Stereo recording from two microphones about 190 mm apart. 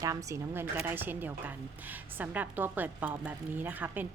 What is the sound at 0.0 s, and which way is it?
A woman's voice, 15° right (ahead or behind).